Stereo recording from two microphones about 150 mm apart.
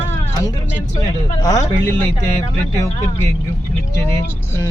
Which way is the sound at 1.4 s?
25° left (ahead or behind).